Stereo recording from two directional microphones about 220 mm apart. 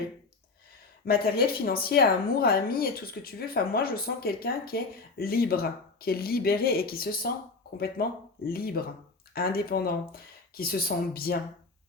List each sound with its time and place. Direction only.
1.0 s speech: 45° left (ahead or behind)